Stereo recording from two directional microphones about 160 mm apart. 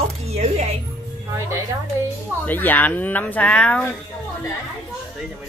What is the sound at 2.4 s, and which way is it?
Speech, 10° left (ahead or behind).